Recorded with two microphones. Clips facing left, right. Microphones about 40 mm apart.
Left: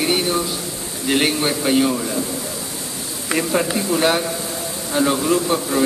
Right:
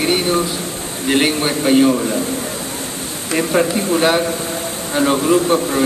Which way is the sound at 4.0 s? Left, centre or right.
Centre.